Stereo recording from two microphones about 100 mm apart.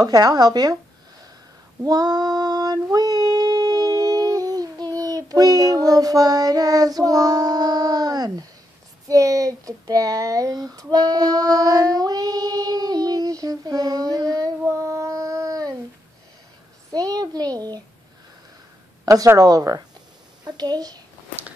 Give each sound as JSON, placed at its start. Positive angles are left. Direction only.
{"t": 0.0, "sound": "speech", "side_deg": -40}
{"t": 1.8, "sound": "female singing", "side_deg": -40}
{"t": 9.0, "sound": "speech", "side_deg": -35}
{"t": 14.6, "sound": "a sound", "side_deg": -30}
{"t": 16.9, "sound": "a sound", "side_deg": -40}
{"t": 19.0, "sound": "a child's voice", "side_deg": -35}